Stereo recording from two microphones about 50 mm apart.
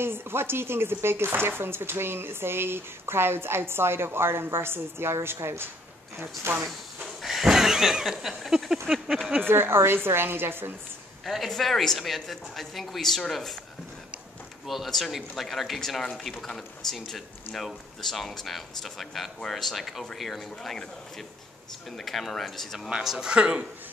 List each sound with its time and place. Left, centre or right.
0.0 s speech: right
7.2 s a sound: centre
9.4 s speech: right
11.2 s speech: centre
14.9 s speech: centre
21.9 s speech: centre
23.0 s a sound: centre
23.3 s speech: right